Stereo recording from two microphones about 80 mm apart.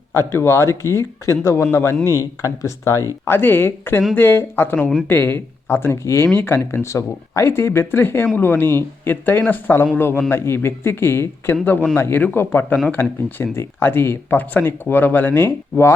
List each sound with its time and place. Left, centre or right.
0.1 s speech: left
3.2 s speech: left